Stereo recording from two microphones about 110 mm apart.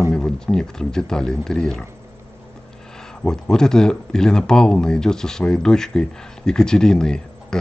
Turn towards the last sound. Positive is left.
turn(degrees=5)  # may be behind; listen again after turning